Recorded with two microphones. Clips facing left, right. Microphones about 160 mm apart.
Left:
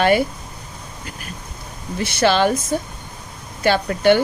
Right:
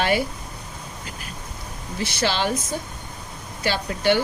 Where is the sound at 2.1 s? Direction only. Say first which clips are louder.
Left 8 dB; 55° left (ahead or behind).